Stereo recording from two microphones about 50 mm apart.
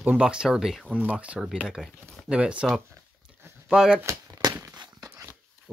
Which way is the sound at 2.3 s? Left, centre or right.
Right.